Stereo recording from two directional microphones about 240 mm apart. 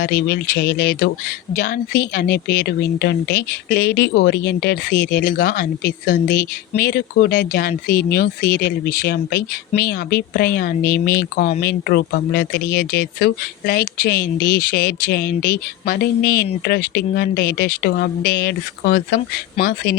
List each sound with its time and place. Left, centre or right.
0.0 s a woman's voice: left